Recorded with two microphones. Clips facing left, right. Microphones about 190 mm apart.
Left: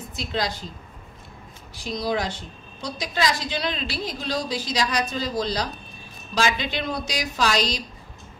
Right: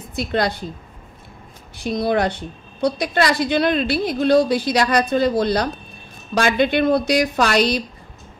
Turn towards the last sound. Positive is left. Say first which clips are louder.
# right 6 dB
turn(degrees=-60)  # may be behind; listen again after turning